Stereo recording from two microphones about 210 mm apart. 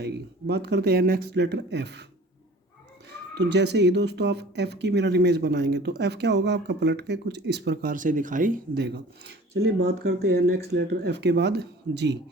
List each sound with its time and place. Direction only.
0.0 s speech: 55° right (ahead or behind)
3.1 s speech: 55° right (ahead or behind)